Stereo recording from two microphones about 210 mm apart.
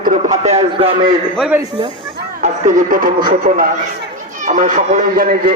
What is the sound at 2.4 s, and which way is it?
Speech, 35° right (ahead or behind).